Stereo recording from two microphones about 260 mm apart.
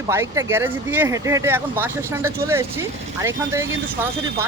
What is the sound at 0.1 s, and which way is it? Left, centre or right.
Speech, centre.